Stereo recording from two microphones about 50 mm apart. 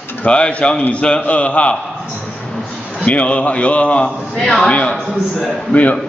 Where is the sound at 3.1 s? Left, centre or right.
Left.